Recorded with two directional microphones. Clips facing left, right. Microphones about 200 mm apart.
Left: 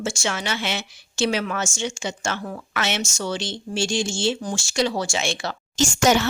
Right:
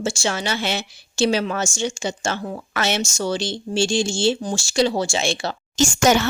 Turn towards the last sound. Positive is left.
turn(degrees=-50)  # may be behind; listen again after turning